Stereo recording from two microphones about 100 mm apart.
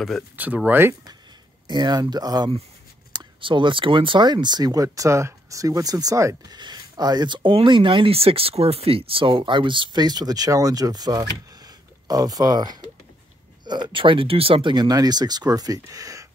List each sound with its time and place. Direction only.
0.7 s speech: 20° right (ahead or behind)
1.7 s speech: 45° right (ahead or behind)
3.1 s speech: 55° right (ahead or behind); by 16.3 s 35° right (ahead or behind)